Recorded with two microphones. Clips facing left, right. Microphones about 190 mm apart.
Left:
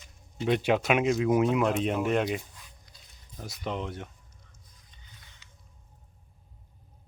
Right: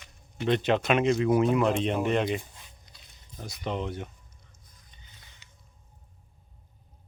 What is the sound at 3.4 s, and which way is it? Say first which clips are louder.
Speech: right 1 dB; centre (ahead or behind).